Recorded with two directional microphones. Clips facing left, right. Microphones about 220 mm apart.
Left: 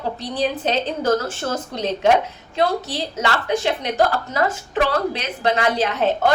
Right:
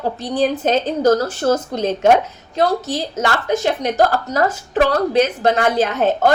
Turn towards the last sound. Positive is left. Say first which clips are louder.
# right 3 dB
turn(degrees=-45)  # may be behind; listen again after turning